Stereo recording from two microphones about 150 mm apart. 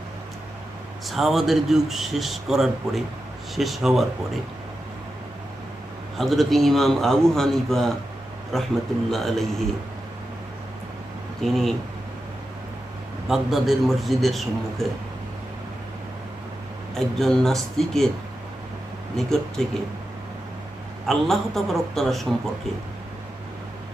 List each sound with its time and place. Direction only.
1.0 s speech: centre (ahead or behind)
6.1 s speech: centre (ahead or behind)
11.4 s speech: centre (ahead or behind)
13.2 s speech: centre (ahead or behind)
16.9 s speech: centre (ahead or behind)
19.1 s speech: 5° left (ahead or behind)
21.1 s speech: centre (ahead or behind)